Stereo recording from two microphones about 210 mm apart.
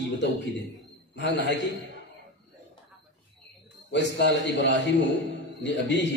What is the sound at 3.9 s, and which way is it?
A man's voice, 55° left (ahead or behind).